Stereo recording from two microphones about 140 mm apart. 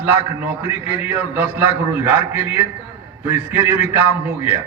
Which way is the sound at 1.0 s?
15° right (ahead or behind).